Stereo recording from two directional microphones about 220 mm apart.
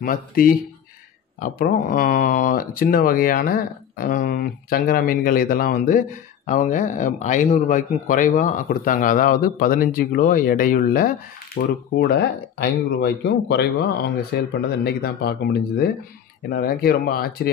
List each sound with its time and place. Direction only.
0.0 s speech: 40° left (ahead or behind)